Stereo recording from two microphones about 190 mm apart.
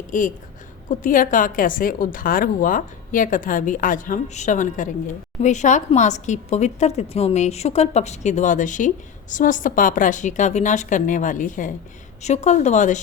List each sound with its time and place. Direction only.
0.1 s a woman's voice: 45° left (ahead or behind)